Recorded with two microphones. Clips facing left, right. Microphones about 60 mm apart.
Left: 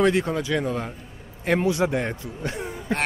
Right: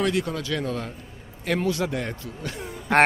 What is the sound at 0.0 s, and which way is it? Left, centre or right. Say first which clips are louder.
A man's voice: left 4 dB; left.